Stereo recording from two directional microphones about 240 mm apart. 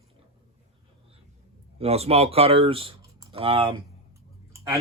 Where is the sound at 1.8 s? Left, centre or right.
Right.